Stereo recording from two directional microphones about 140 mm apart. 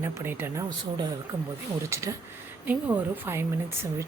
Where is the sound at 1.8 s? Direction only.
20° right (ahead or behind).